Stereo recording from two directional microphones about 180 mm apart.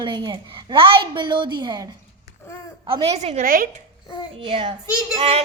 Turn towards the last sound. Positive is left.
turn(degrees=-35)  # may be behind; listen again after turning